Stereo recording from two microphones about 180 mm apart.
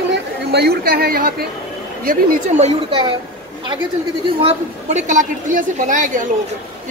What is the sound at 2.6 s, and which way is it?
Speech, 30° right (ahead or behind).